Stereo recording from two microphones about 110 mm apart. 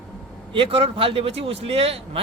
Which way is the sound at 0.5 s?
55° right (ahead or behind).